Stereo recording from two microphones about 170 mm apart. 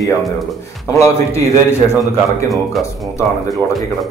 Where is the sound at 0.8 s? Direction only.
15° left (ahead or behind).